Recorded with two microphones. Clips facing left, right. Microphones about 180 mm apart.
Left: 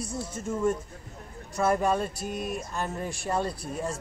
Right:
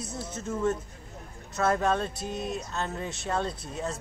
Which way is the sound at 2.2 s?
25° right (ahead or behind).